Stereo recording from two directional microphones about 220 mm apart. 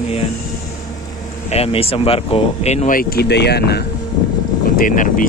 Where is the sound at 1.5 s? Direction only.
25° left (ahead or behind).